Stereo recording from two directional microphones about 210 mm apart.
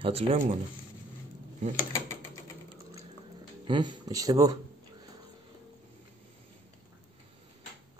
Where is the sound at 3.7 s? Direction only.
20° right (ahead or behind).